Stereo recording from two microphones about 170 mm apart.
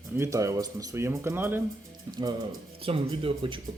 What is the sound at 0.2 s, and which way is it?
Speech, 20° right (ahead or behind).